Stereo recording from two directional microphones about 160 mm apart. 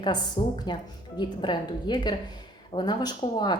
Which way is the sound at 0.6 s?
25° left (ahead or behind).